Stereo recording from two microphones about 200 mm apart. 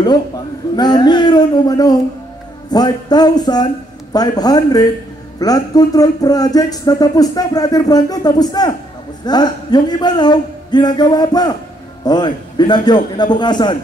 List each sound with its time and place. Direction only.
0.7 s speech: 20° left (ahead or behind)